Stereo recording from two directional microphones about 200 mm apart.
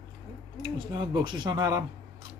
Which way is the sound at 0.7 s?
20° right (ahead or behind).